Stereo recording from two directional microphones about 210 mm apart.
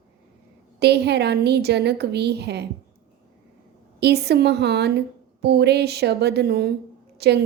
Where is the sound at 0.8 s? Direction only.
50° right (ahead or behind).